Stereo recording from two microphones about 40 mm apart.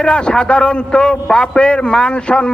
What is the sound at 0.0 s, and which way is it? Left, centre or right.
A man's voice, left.